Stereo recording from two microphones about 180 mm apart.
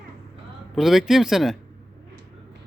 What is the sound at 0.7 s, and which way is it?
Speech, centre (ahead or behind).